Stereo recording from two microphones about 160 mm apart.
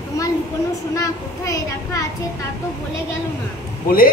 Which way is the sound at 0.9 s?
20° left (ahead or behind).